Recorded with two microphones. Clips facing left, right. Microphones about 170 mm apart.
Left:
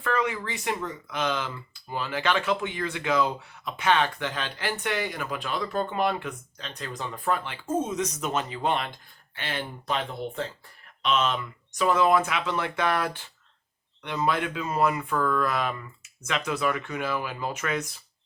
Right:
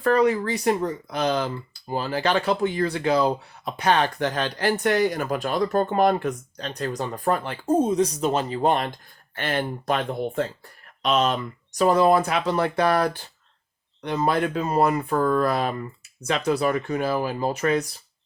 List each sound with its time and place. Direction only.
0.0 s speech: 40° right (ahead or behind)